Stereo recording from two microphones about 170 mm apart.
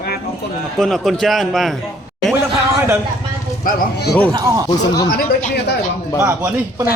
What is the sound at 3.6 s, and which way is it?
Speech, 55° left (ahead or behind).